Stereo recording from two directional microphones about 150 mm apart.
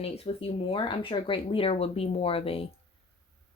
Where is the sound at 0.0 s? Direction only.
40° left (ahead or behind).